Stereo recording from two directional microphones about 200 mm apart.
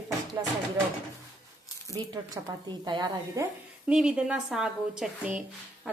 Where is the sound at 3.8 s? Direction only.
5° right (ahead or behind).